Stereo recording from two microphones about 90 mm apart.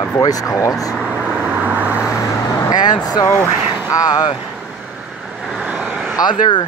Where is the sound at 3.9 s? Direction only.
45° left (ahead or behind).